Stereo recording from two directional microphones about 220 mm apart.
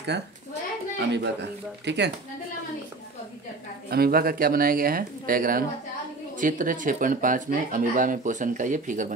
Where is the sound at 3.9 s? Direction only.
45° right (ahead or behind).